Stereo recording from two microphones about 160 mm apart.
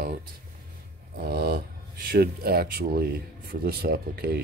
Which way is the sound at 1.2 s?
80° right.